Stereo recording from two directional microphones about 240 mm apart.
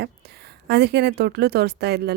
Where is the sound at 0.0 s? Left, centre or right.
Right.